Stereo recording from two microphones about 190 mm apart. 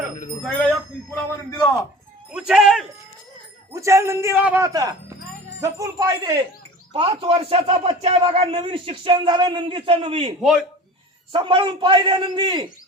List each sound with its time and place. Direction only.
0.4 s speech: 5° left (ahead or behind)
3.8 s a man's voice: 15° right (ahead or behind)